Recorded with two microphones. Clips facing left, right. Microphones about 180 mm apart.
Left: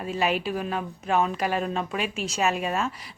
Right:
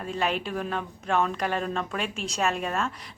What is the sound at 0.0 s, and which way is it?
Speech, 5° left (ahead or behind).